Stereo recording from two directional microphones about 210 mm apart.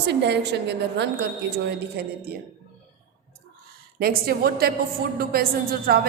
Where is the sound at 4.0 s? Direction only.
45° right (ahead or behind).